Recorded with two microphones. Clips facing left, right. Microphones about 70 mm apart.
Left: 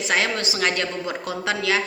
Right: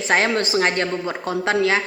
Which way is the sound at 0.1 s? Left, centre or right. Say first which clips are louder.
Right 5 dB; right.